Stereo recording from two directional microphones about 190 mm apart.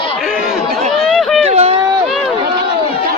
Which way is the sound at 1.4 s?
35° right (ahead or behind).